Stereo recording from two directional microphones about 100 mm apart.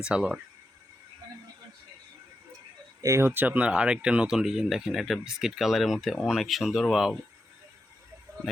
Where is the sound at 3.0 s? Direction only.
30° right (ahead or behind); by 7.1 s 5° right (ahead or behind).